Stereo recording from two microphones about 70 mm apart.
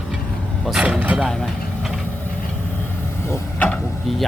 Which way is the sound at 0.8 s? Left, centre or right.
Centre.